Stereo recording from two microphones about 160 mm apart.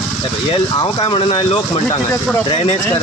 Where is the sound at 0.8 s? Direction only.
30° left (ahead or behind).